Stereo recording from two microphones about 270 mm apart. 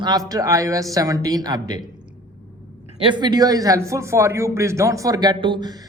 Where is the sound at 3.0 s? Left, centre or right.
Centre.